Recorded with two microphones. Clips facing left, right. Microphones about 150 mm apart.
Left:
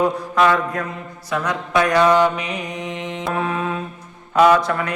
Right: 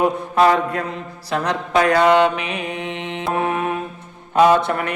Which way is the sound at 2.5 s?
25° right (ahead or behind).